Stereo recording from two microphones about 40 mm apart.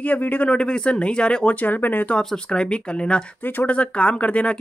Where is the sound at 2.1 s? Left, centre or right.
Left.